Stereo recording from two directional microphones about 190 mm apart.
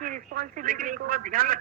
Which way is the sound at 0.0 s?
45° right (ahead or behind).